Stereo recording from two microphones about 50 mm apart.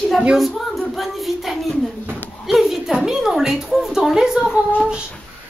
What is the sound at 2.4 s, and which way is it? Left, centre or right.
A woman's voice, centre.